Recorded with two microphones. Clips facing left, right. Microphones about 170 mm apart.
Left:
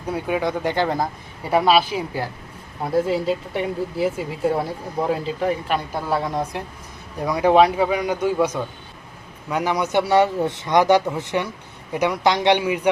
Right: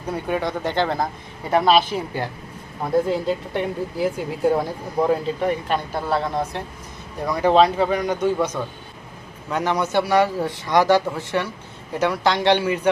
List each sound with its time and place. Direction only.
0.1 s speech: 10° left (ahead or behind)